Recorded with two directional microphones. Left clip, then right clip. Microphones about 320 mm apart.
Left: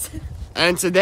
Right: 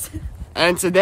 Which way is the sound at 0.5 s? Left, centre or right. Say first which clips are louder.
Right 1 dB; centre.